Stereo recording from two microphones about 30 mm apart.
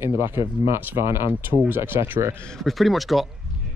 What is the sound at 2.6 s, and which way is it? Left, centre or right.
Speech, centre.